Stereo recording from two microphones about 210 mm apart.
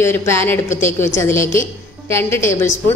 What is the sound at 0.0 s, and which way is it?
A woman's voice, 10° left (ahead or behind).